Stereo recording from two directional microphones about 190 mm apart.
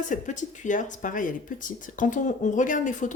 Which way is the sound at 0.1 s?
40° left (ahead or behind).